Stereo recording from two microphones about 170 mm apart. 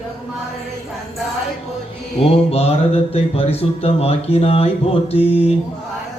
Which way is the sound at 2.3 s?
35° left (ahead or behind).